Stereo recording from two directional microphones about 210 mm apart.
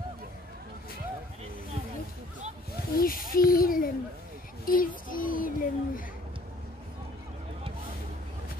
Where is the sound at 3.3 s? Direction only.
45° left (ahead or behind).